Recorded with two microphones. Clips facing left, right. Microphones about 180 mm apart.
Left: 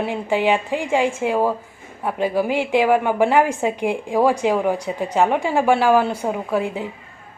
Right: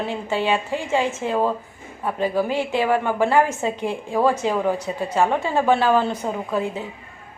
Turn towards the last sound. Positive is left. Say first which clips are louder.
# left 2 dB
turn(degrees=15)  # may be behind; listen again after turning